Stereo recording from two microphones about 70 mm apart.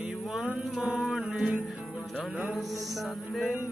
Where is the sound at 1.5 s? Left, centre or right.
Centre.